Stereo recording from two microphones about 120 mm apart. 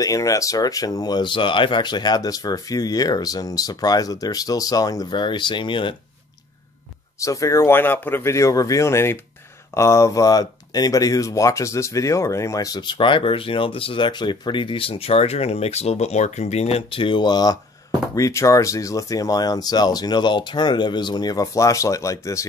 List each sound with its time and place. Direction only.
0.0 s speech: 30° left (ahead or behind); by 5.9 s 45° left (ahead or behind)
7.2 s speech: 25° left (ahead or behind)